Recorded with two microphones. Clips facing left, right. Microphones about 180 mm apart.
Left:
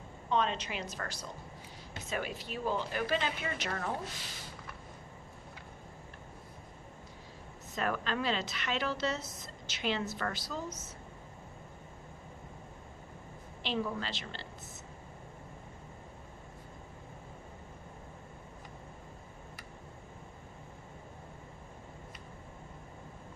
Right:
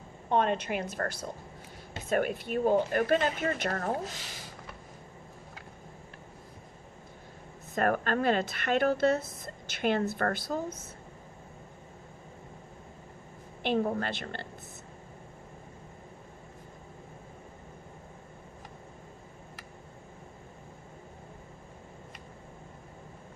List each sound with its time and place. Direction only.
0.3 s speech: 55° right (ahead or behind)
7.8 s speech: 50° right (ahead or behind)
13.6 s a woman's voice: 55° right (ahead or behind)